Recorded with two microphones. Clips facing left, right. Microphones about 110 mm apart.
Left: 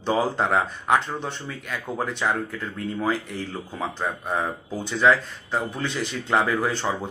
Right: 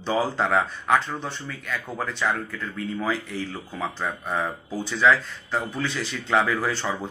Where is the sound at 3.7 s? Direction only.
15° left (ahead or behind).